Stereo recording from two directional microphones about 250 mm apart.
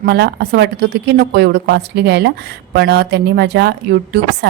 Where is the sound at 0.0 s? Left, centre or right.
Right.